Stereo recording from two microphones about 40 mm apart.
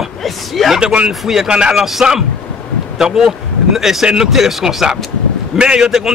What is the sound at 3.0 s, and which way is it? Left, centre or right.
A man's voice, centre.